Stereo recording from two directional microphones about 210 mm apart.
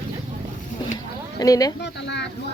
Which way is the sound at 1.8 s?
55° left (ahead or behind).